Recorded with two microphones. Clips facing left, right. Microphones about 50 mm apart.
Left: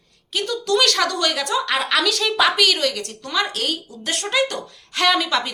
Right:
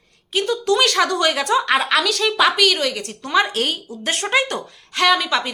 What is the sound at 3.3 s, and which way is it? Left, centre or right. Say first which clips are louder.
Speech: right 4 dB; right.